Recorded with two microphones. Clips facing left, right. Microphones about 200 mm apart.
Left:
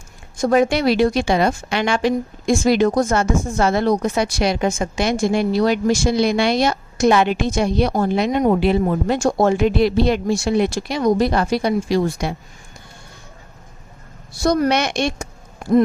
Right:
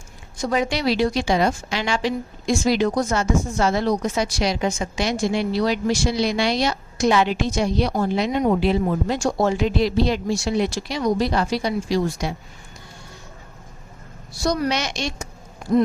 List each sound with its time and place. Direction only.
0.3 s a woman's voice: 50° left (ahead or behind)
14.3 s a woman's voice: 55° left (ahead or behind)